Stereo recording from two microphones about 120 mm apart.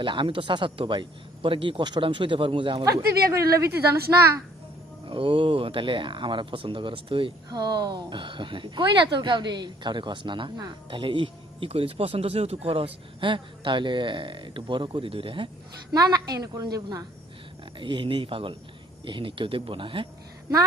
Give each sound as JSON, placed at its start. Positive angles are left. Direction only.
{"t": 0.0, "sound": "speech", "side_deg": -45}
{"t": 2.8, "sound": "speech", "side_deg": -30}
{"t": 5.0, "sound": "speech", "side_deg": -45}
{"t": 15.9, "sound": "a woman's voice", "side_deg": -35}
{"t": 17.7, "sound": "speech", "side_deg": -45}